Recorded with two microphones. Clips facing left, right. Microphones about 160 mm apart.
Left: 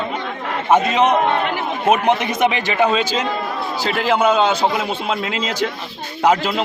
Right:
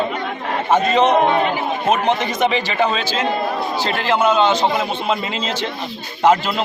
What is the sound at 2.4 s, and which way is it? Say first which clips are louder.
A man's voice: left 1 dB; 5° left (ahead or behind).